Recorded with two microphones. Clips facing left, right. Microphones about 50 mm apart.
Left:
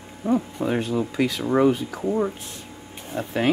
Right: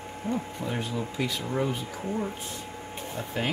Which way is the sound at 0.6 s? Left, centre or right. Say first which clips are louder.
Left 8 dB; left.